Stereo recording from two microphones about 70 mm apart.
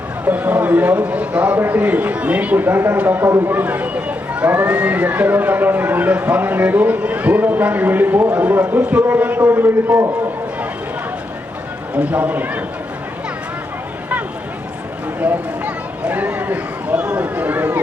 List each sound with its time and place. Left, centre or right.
0.3 s speech: right
11.9 s speech: centre
15.2 s a sound: right